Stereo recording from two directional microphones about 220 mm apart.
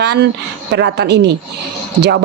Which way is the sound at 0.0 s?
50° right (ahead or behind).